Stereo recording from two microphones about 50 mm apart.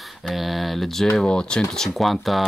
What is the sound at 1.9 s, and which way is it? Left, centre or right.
Speech, centre.